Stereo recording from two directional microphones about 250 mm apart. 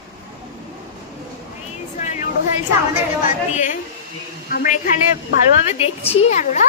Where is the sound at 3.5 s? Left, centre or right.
Left.